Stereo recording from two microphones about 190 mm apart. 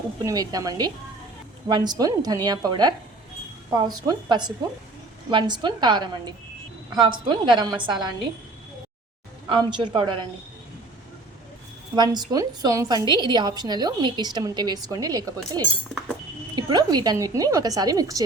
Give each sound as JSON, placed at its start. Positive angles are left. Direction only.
{"t": 0.3, "sound": "a woman's voice", "side_deg": -20}
{"t": 9.5, "sound": "a woman's voice", "side_deg": -25}
{"t": 11.9, "sound": "a woman's voice", "side_deg": -20}
{"t": 15.6, "sound": "speech", "side_deg": 5}
{"t": 16.6, "sound": "a woman's voice", "side_deg": -20}